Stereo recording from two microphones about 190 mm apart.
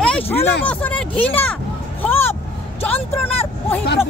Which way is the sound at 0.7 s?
5° left (ahead or behind).